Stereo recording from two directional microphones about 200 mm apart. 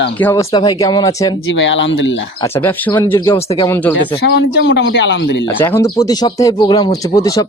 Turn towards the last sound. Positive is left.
turn(degrees=15)  # may be behind; listen again after turning